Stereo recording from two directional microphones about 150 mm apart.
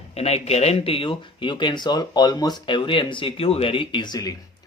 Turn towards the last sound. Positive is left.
turn(degrees=25)  # may be behind; listen again after turning